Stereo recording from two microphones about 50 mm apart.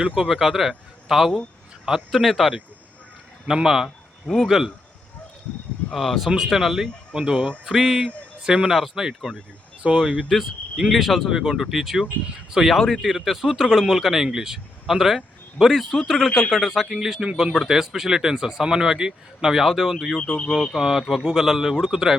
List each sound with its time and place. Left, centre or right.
0.2 s speech: centre
3.8 s a sound: centre
4.4 s speech: centre
5.9 s speech: centre
7.1 s speech: centre
7.6 s speech: centre
8.4 s speech: centre
8.7 s speech: centre
10.3 s speech: centre
20.1 s speech: centre
20.7 s speech: centre